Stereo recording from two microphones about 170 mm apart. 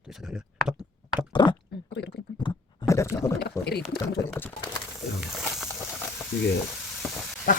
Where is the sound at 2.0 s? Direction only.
80° left.